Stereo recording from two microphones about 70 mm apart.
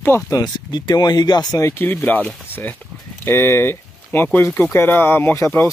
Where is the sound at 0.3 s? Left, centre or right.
Left.